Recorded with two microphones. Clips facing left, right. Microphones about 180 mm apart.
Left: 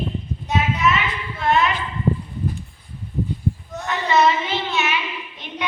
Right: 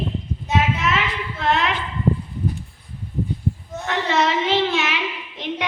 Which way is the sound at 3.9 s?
85° right.